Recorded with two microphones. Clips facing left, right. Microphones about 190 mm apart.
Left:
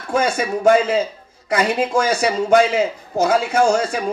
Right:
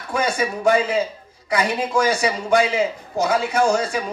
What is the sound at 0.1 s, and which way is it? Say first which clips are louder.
Speech: left 3 dB; 45° left (ahead or behind).